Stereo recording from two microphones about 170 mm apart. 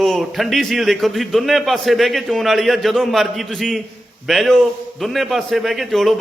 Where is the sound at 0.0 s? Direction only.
Centre (ahead or behind).